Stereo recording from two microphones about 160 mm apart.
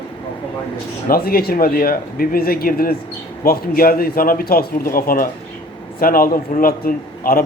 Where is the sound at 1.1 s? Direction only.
70° left (ahead or behind).